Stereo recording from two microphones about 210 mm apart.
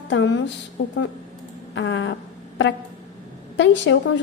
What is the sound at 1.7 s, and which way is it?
Speech, 60° left (ahead or behind).